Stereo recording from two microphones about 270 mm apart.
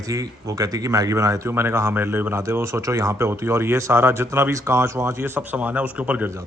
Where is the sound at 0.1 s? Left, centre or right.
Centre.